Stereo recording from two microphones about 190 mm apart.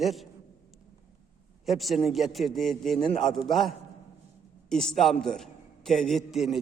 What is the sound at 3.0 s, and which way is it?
Speech, 25° left (ahead or behind).